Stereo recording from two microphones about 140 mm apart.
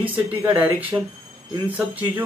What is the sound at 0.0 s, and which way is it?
Speech, 10° right (ahead or behind).